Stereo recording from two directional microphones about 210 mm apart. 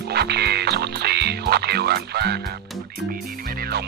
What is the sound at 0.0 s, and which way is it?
Music, 50° right (ahead or behind).